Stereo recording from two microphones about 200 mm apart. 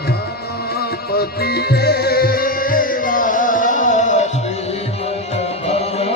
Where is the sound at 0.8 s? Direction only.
50° left (ahead or behind).